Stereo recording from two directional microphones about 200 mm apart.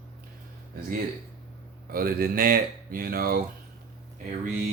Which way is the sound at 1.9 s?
45° right (ahead or behind).